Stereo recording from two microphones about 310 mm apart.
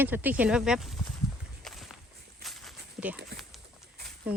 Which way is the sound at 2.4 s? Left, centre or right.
Centre.